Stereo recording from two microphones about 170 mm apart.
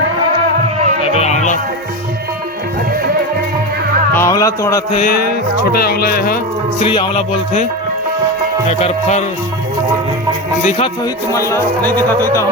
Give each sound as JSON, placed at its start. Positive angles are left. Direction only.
{"t": 1.0, "sound": "music", "side_deg": 40}
{"t": 4.1, "sound": "music", "side_deg": 15}
{"t": 4.9, "sound": "speech", "side_deg": 60}
{"t": 6.7, "sound": "music", "side_deg": 30}
{"t": 8.8, "sound": "music", "side_deg": 40}
{"t": 11.3, "sound": "speech", "side_deg": 20}